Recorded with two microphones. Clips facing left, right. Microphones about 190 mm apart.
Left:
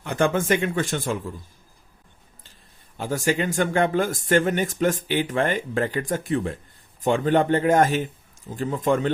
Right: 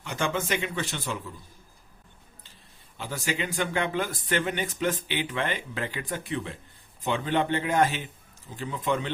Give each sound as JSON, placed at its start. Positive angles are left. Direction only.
{"t": 0.0, "sound": "speech", "side_deg": 55}
{"t": 3.0, "sound": "speech", "side_deg": 45}